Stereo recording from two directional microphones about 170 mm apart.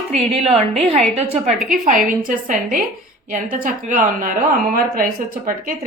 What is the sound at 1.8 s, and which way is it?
A woman's voice, 50° right (ahead or behind).